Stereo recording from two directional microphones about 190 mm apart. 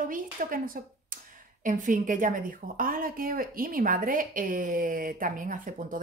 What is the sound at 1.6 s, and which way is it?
A woman's voice, 45° right (ahead or behind).